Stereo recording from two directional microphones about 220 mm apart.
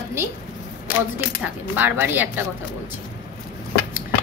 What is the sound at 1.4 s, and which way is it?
A woman's voice, 10° right (ahead or behind).